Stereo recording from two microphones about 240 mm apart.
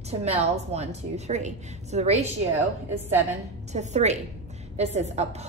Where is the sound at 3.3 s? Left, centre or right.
Right.